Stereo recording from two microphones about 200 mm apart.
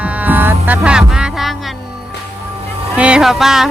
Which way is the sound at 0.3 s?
10° right (ahead or behind).